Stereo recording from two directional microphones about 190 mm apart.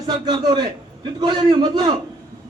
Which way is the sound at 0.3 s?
25° right (ahead or behind).